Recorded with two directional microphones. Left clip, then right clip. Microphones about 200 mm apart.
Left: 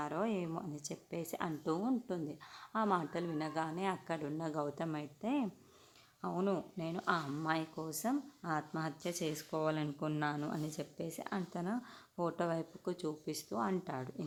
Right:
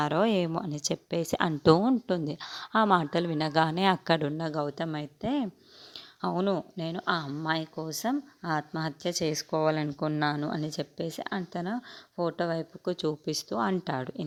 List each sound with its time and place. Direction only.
0.0 s speech: 40° right (ahead or behind)